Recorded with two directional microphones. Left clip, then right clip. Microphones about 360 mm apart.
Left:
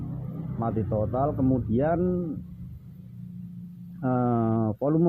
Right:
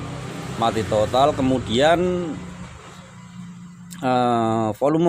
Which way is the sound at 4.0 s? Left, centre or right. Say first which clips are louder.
Right 8 dB; centre.